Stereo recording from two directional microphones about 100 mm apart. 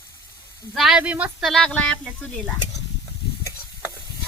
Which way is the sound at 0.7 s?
5° right (ahead or behind).